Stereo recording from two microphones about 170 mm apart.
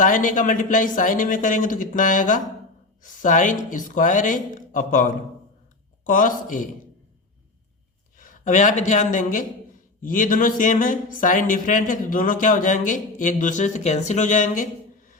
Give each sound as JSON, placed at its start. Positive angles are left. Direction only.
{"t": 0.0, "sound": "speech", "side_deg": 50}
{"t": 8.2, "sound": "speech", "side_deg": 50}